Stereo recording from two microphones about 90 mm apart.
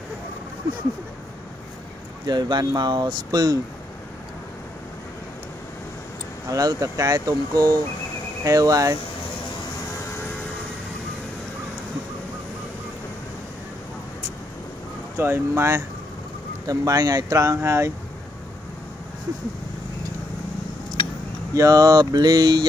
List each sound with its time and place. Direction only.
2.2 s speech: 50° right (ahead or behind)
6.5 s speech: 40° right (ahead or behind)
15.1 s speech: 30° right (ahead or behind)
16.6 s speech: 40° right (ahead or behind)
21.5 s speech: 40° right (ahead or behind)